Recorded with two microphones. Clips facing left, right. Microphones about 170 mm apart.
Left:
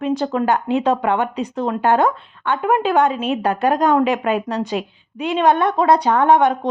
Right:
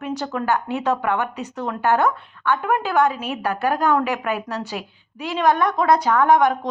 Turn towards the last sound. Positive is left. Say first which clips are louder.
# left 2 dB
turn(degrees=30)  # may be behind; listen again after turning